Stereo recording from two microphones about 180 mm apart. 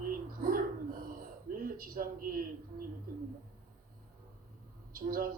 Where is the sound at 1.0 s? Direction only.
50° right (ahead or behind).